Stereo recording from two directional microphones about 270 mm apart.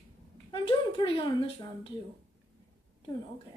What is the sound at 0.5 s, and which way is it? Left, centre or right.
A woman's voice, centre.